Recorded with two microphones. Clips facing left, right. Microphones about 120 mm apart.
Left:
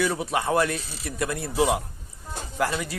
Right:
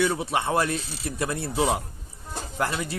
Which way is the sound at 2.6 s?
25° right (ahead or behind).